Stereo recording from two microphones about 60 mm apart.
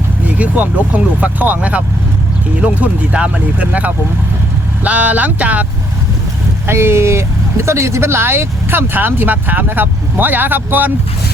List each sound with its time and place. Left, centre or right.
0.3 s speech: right
6.7 s speech: right